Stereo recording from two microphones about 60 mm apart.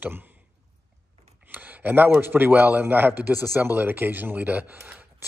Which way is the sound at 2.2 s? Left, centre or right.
Right.